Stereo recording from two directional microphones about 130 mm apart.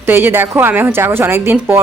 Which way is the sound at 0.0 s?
15° right (ahead or behind).